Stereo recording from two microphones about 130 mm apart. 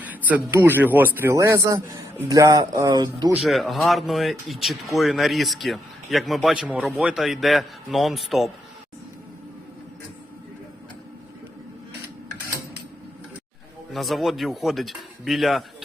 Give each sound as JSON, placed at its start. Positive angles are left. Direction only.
{"t": 0.0, "sound": "speech", "side_deg": -15}
{"t": 3.3, "sound": "speech", "side_deg": 0}
{"t": 13.9, "sound": "speech", "side_deg": 0}